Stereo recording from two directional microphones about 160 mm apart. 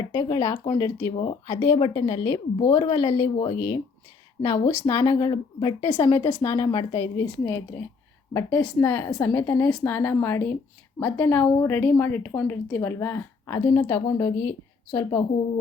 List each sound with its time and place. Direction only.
0.1 s speech: 25° left (ahead or behind)
7.4 s a woman's voice: 10° left (ahead or behind)